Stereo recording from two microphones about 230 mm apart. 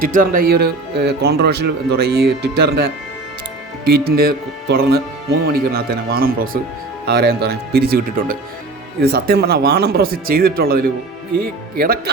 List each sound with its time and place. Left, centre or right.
0.0 s speech: right